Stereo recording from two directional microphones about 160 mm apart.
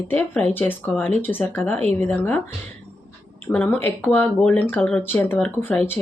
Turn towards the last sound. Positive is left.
turn(degrees=10)  # may be behind; listen again after turning